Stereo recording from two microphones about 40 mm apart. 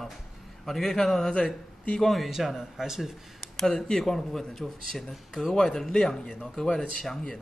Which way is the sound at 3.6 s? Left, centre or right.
Centre.